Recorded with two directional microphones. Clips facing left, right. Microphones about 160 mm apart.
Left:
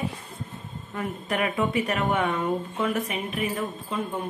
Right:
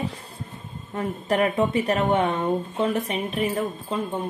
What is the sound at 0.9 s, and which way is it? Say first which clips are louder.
Speech: right 5 dB; 35° right (ahead or behind).